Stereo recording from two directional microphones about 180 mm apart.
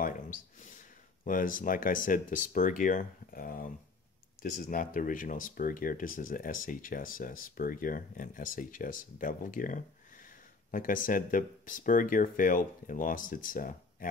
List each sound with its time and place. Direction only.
1.2 s speech: 50° left (ahead or behind)